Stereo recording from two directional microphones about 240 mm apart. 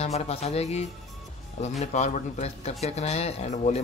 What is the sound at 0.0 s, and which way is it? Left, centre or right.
A man's voice, left.